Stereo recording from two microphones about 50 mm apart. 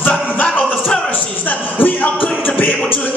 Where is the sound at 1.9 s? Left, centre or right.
Left.